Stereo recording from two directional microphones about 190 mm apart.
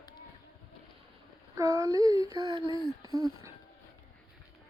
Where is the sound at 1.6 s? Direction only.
15° right (ahead or behind).